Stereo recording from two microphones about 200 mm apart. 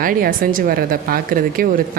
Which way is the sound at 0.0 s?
45° right (ahead or behind).